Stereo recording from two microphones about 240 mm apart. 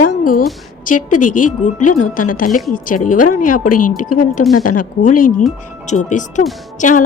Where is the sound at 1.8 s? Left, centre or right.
Left.